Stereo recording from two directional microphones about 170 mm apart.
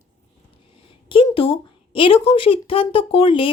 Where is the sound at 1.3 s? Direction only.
30° left (ahead or behind).